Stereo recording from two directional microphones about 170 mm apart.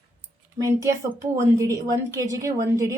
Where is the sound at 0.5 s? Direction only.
20° right (ahead or behind).